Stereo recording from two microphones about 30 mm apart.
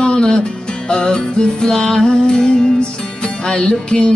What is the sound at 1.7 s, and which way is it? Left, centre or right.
Music, centre.